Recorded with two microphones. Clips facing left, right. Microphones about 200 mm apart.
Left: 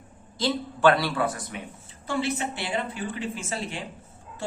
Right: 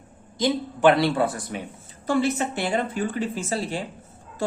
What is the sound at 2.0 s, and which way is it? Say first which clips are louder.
Speech: right 5 dB; 45° right (ahead or behind).